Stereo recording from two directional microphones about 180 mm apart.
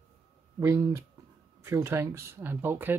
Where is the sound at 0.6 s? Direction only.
15° right (ahead or behind).